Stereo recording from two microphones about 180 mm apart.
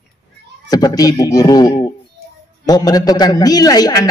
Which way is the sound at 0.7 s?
20° left (ahead or behind).